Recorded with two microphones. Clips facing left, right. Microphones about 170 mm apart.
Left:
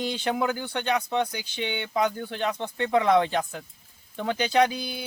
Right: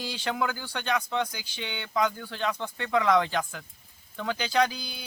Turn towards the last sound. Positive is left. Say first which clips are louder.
# left 4 dB
turn(degrees=25)  # may be behind; listen again after turning